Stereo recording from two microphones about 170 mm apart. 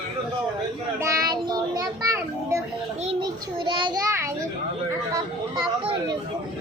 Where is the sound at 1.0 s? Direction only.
20° right (ahead or behind).